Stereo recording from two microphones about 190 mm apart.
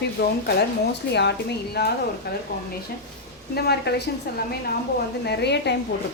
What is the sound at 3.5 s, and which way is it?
A woman's voice, 60° left (ahead or behind).